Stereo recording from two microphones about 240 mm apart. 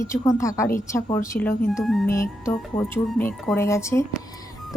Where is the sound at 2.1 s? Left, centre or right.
Centre.